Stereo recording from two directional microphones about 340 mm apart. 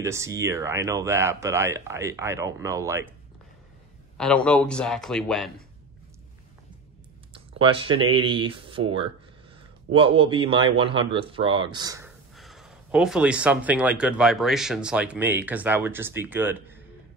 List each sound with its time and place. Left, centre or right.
0.0 s speech: centre
4.2 s speech: centre
7.5 s speech: centre